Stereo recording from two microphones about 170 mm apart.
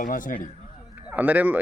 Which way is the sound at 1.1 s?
10° right (ahead or behind).